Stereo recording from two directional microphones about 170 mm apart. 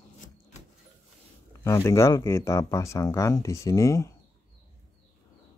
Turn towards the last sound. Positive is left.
turn(degrees=20)  # may be behind; listen again after turning